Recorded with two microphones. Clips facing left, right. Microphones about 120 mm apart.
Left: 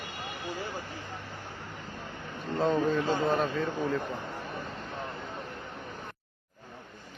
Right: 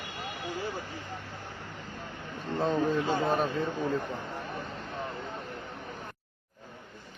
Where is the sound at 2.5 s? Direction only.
15° left (ahead or behind).